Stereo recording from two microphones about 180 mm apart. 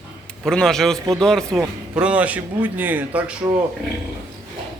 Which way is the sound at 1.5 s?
10° right (ahead or behind).